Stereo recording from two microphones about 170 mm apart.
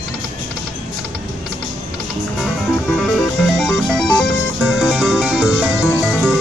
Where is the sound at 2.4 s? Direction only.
Centre (ahead or behind).